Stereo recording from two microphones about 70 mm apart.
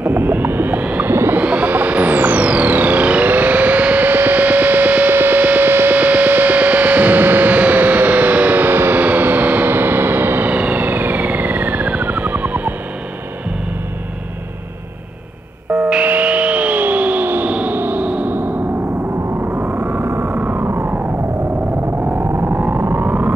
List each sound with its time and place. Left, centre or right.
0.0 s music: right
1.4 s music: right
15.7 s music: centre
19.5 s a sound: right
20.1 s synthesizer: right
22.3 s vehicle: right